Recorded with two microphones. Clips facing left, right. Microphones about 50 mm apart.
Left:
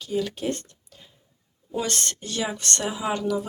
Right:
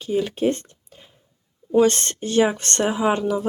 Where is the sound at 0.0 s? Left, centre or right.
Right.